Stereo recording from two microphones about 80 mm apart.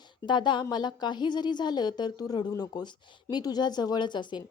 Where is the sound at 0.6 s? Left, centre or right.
Left.